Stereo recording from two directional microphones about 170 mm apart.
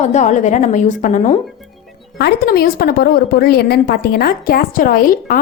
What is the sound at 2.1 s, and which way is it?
A woman's voice, 70° left (ahead or behind).